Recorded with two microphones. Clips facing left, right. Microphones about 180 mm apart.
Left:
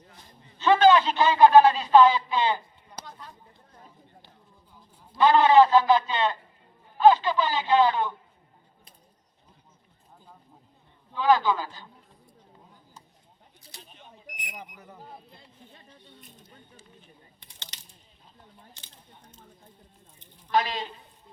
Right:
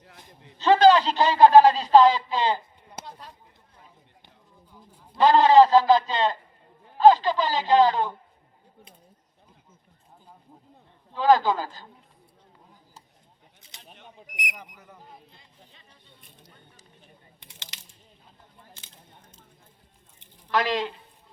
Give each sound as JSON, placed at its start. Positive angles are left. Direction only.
{"t": 0.6, "sound": "a sound", "side_deg": -35}
{"t": 5.1, "sound": "a man's voice", "side_deg": -35}
{"t": 11.1, "sound": "a man's voice", "side_deg": -40}
{"t": 14.5, "sound": "speech", "side_deg": 15}
{"t": 20.5, "sound": "speech", "side_deg": -80}